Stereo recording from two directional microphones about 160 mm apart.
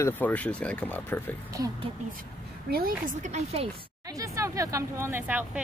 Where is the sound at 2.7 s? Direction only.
70° right (ahead or behind).